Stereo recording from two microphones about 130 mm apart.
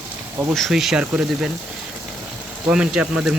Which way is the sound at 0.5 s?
Centre (ahead or behind).